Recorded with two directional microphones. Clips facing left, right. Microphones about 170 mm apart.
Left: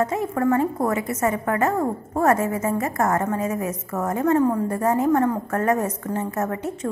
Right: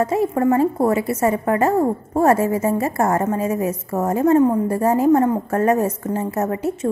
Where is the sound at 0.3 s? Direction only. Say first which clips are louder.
Right 4 dB; 25° right (ahead or behind).